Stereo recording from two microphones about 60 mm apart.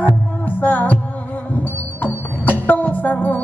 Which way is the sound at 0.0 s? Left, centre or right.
Left.